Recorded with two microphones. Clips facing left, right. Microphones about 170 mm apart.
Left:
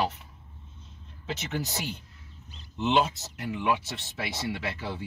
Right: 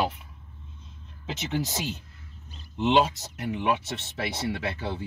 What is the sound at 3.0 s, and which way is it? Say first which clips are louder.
Speech: right 3 dB; 25° right (ahead or behind).